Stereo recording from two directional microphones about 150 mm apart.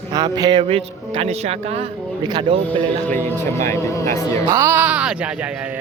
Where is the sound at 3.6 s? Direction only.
20° left (ahead or behind).